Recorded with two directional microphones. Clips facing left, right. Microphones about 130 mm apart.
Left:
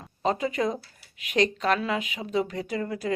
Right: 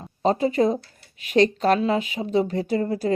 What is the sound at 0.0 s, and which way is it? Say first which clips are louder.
Speech: right 5 dB; 35° right (ahead or behind).